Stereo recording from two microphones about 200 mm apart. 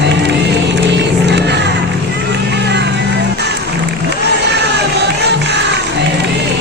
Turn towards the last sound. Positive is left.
turn(degrees=-55)  # may be behind; listen again after turning